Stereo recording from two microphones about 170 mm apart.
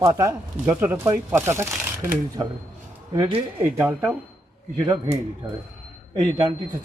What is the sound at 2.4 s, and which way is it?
Speech, 25° right (ahead or behind).